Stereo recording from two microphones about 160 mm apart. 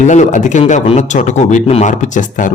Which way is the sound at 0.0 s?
50° left (ahead or behind).